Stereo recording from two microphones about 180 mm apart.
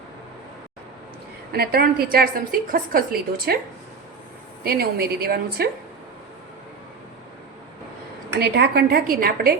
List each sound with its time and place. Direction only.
1.5 s a woman's voice: 60° right (ahead or behind)
4.6 s a woman's voice: 55° right (ahead or behind)
8.4 s a woman's voice: 65° right (ahead or behind)